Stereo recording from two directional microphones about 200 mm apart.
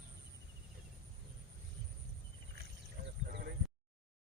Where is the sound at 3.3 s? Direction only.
50° right (ahead or behind).